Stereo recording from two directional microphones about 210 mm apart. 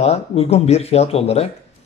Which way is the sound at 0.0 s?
30° left (ahead or behind).